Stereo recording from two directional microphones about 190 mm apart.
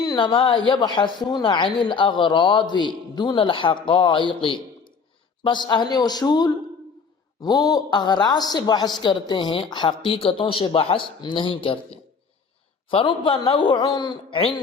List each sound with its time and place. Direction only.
0.0 s a woman's voice: 20° left (ahead or behind)